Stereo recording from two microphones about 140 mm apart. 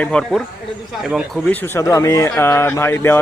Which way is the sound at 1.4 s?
15° left (ahead or behind).